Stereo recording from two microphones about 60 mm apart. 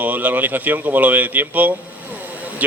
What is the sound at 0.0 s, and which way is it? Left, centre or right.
Speech, right.